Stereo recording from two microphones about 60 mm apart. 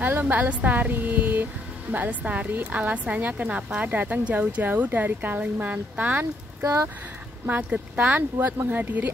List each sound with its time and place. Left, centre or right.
0.0 s speech: right
6.6 s speech: right
7.4 s speech: right
8.4 s speech: right